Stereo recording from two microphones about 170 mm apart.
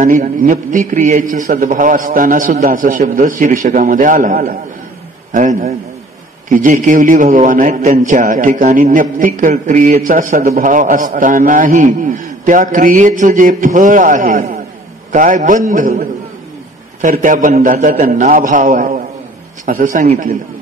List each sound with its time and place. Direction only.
0.0 s a man's voice: 50° right (ahead or behind)